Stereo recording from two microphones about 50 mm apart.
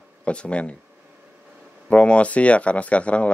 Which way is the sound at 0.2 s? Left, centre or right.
Left.